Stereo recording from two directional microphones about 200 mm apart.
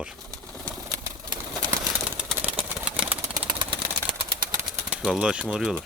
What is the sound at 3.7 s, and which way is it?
Typewriter, 25° right (ahead or behind).